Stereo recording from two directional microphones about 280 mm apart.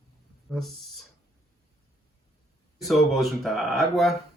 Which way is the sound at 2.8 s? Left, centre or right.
Centre.